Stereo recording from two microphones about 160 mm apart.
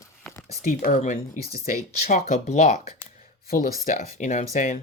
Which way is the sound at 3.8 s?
50° left (ahead or behind).